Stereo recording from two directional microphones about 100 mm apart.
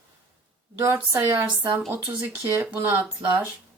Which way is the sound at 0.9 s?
25° right (ahead or behind).